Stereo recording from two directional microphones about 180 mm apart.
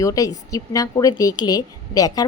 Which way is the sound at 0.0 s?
20° left (ahead or behind).